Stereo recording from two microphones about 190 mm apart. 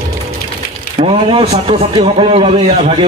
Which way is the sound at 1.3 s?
30° right (ahead or behind).